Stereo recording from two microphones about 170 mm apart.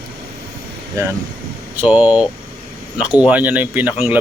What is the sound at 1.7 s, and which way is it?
Speech, 10° right (ahead or behind).